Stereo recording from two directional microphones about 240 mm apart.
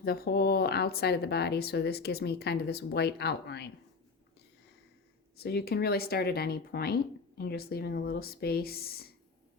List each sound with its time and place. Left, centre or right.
0.0 s speech: left
5.4 s speech: left